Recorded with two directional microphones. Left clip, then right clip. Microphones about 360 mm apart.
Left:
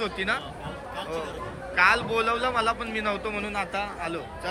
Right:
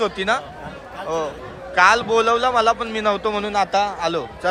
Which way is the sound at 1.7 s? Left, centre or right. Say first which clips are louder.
Right 7 dB; centre.